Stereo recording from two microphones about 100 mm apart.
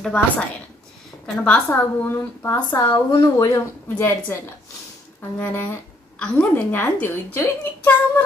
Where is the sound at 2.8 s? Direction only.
50° left (ahead or behind).